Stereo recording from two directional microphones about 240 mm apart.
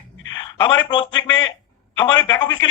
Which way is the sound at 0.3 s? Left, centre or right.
Centre.